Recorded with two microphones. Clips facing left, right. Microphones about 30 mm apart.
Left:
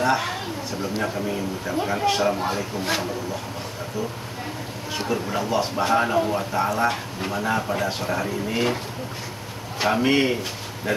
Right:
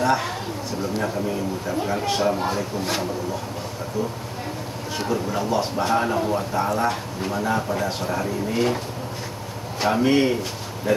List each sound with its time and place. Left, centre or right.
0.0 s speech: centre
5.1 s speech: left
10.0 s speech: centre